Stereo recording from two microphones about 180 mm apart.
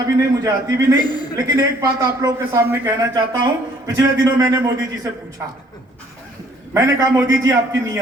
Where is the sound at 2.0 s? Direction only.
20° right (ahead or behind).